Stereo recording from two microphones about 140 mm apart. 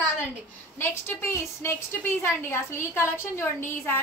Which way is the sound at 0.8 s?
15° left (ahead or behind).